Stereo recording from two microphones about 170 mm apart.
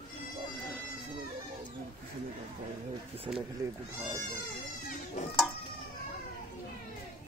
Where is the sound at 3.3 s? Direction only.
25° right (ahead or behind).